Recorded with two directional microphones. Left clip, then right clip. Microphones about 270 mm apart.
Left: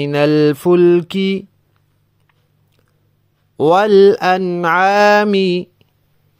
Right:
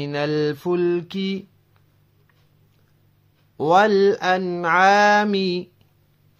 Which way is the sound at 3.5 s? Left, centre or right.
Left.